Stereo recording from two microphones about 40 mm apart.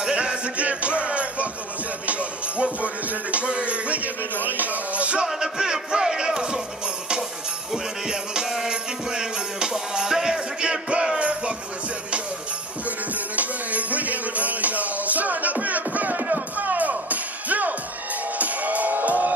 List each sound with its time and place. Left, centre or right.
0.1 s music: right
5.3 s music: centre
7.7 s music: centre; by 11.5 s right
12.8 s music: right